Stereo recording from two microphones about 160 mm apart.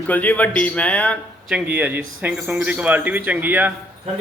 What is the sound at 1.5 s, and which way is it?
Speech, 5° right (ahead or behind).